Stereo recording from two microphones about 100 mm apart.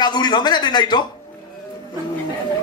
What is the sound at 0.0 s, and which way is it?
Speech, 45° left (ahead or behind).